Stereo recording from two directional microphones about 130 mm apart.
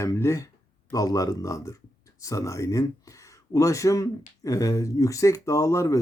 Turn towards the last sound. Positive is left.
turn(degrees=25)  # may be behind; listen again after turning